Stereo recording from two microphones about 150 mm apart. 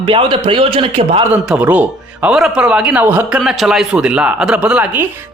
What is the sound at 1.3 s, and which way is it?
A man's voice, 10° right (ahead or behind).